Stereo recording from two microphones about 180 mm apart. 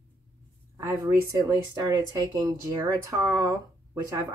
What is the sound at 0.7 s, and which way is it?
Speech, 20° right (ahead or behind).